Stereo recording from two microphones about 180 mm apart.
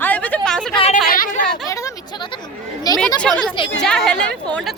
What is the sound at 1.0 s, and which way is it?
Chatter, 50° left (ahead or behind).